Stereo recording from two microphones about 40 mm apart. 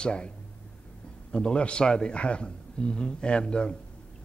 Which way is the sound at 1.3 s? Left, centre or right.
Left.